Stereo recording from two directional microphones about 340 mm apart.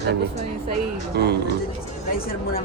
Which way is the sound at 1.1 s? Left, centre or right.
Right.